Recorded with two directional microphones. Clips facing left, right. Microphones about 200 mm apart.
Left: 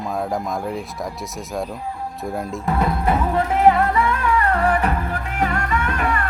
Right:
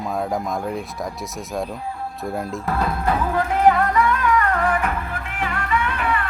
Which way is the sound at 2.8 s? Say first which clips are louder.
Left 2 dB; 25° left (ahead or behind).